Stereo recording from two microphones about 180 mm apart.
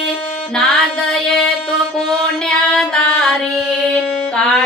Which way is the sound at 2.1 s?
Centre (ahead or behind).